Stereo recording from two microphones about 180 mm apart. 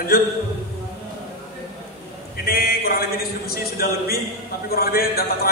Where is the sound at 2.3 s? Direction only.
55° left (ahead or behind).